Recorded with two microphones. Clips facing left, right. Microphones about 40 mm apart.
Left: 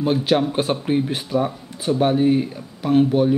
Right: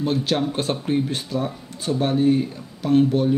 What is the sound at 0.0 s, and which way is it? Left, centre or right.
Speech, centre.